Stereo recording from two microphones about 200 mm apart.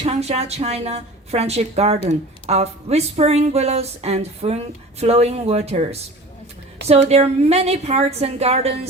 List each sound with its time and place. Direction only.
0.0 s speech: 30° right (ahead or behind)
7.1 s speech: 30° right (ahead or behind)